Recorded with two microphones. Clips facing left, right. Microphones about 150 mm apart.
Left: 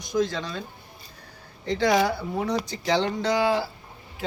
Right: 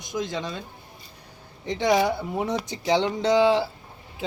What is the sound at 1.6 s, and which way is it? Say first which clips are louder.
Speech: even; 20° right (ahead or behind).